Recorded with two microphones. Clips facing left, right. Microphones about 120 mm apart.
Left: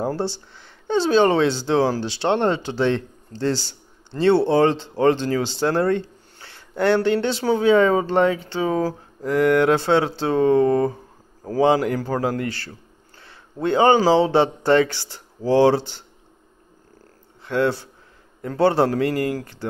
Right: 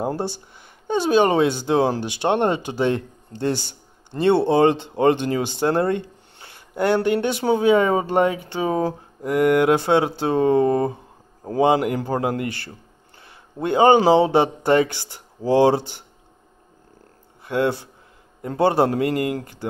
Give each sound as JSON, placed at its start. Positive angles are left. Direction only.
{"t": 0.0, "sound": "a man's voice", "side_deg": -15}
{"t": 17.5, "sound": "a man's voice", "side_deg": -15}